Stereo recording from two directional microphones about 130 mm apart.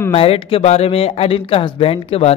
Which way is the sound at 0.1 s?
45° left (ahead or behind).